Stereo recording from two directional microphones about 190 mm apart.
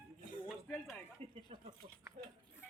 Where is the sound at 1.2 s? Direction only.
30° right (ahead or behind).